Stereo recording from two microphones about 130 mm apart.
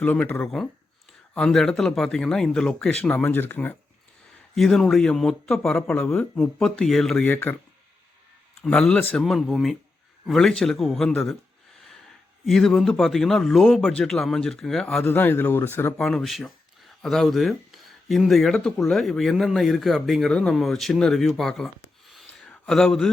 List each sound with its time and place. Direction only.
0.0 s speech: 10° left (ahead or behind)
4.5 s speech: centre (ahead or behind)
7.3 s speech: 15° left (ahead or behind)
8.6 s speech: 5° left (ahead or behind)
12.5 s speech: 5° left (ahead or behind)
15.0 s speech: 15° left (ahead or behind)
16.0 s speech: 5° left (ahead or behind)
22.1 s a sound: 5° left (ahead or behind)